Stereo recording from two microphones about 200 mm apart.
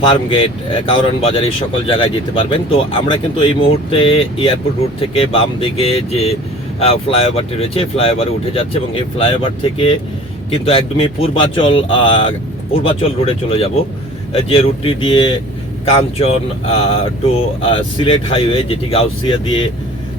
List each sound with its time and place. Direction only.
0.0 s speech: 25° left (ahead or behind)